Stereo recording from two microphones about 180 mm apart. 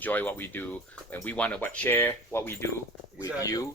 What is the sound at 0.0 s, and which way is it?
Speech, 10° left (ahead or behind).